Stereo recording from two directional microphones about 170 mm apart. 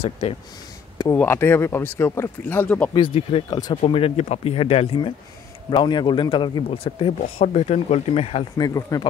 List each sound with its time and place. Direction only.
0.0 s speech: 35° left (ahead or behind)
1.1 s speech: 15° left (ahead or behind)
2.9 s a man's voice: 30° left (ahead or behind)
8.5 s a man's voice: 20° left (ahead or behind)